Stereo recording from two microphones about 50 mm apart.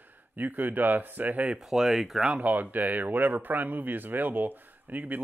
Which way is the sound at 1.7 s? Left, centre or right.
Centre.